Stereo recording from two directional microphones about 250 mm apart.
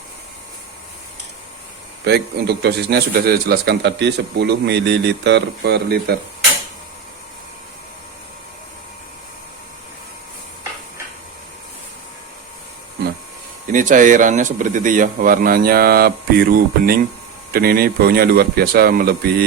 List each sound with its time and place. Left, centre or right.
2.0 s a man's voice: right
13.7 s a man's voice: right